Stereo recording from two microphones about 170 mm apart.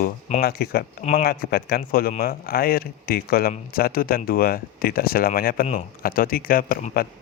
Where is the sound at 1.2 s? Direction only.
65° left (ahead or behind).